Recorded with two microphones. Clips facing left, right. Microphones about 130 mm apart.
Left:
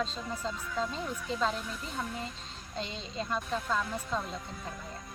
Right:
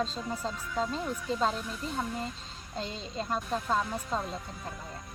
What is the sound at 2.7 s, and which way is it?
Speech, 40° right (ahead or behind).